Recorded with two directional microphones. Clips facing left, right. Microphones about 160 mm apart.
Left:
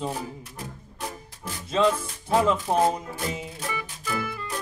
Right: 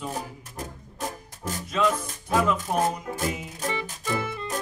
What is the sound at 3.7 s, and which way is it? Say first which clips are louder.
Music: right 3 dB; 25° right (ahead or behind).